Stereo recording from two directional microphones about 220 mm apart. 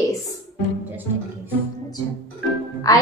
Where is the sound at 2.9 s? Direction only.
15° left (ahead or behind).